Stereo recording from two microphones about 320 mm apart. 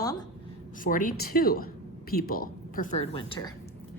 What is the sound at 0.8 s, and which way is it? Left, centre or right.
A woman's voice, left.